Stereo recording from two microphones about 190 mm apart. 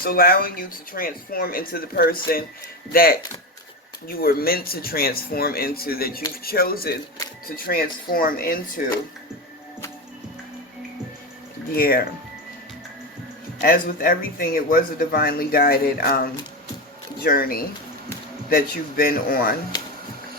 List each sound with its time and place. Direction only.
0.0 s speech: 50° left (ahead or behind)
4.2 s speech: 50° left (ahead or behind)
11.7 s speech: 50° left (ahead or behind)
13.6 s speech: 45° left (ahead or behind)